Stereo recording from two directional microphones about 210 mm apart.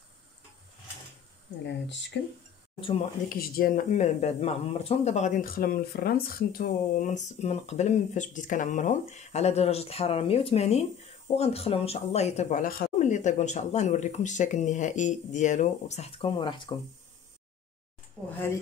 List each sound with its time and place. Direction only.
1.7 s speech: 55° left (ahead or behind)
2.8 s speech: 25° left (ahead or behind)
3.3 s speech: 45° left (ahead or behind); by 16.7 s 25° left (ahead or behind)
18.2 s speech: 5° left (ahead or behind)